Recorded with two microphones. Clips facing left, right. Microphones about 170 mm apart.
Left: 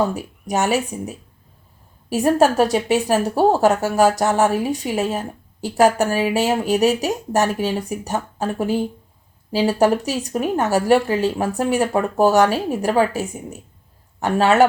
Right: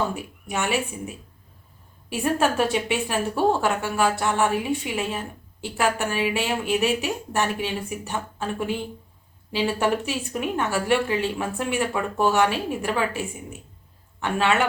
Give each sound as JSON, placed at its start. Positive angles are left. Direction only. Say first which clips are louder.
{"t": 0.1, "sound": "a woman's voice", "louder": "left 6 dB", "side_deg": 40}